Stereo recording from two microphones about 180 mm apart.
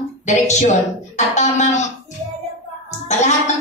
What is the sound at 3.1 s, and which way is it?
Speech, 40° left (ahead or behind).